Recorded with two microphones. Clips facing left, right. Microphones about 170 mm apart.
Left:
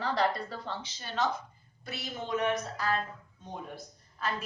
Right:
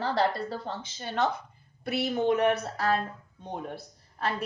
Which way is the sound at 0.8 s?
55° right (ahead or behind).